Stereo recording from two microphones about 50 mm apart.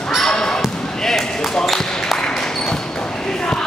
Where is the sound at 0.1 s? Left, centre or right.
Centre.